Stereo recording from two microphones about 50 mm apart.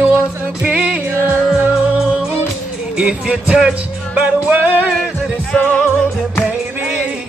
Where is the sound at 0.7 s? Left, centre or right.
Right.